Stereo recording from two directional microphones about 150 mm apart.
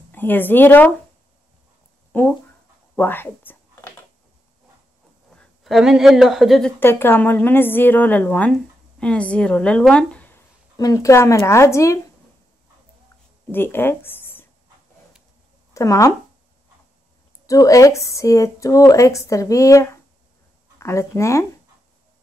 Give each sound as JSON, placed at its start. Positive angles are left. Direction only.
{"t": 0.1, "sound": "a woman's voice", "side_deg": 15}
{"t": 2.1, "sound": "speech", "side_deg": 15}
{"t": 3.0, "sound": "a sound", "side_deg": 15}
{"t": 5.3, "sound": "speech", "side_deg": 5}
{"t": 6.8, "sound": "a woman's voice", "side_deg": 15}
{"t": 10.8, "sound": "speech", "side_deg": 20}
{"t": 13.5, "sound": "speech", "side_deg": 15}
{"t": 15.7, "sound": "speech", "side_deg": 20}
{"t": 17.5, "sound": "speech", "side_deg": 20}